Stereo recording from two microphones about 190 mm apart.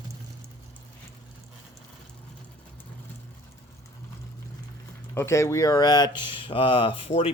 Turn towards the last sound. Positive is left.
turn(degrees=30)  # may be behind; listen again after turning